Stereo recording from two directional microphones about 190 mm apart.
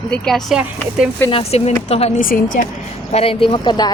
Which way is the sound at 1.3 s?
30° left (ahead or behind).